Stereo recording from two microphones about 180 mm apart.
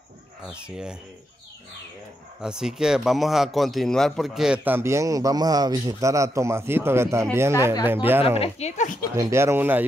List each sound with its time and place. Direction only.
0.5 s speech: 5° right (ahead or behind)
2.4 s a man's voice: 5° right (ahead or behind)
8.4 s speech: 35° left (ahead or behind)
9.1 s a man's voice: 15° right (ahead or behind)